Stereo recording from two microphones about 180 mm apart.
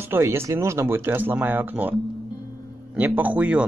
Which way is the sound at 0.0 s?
15° right (ahead or behind).